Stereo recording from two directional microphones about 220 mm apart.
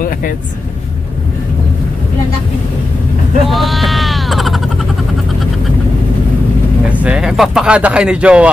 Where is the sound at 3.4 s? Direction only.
Centre (ahead or behind).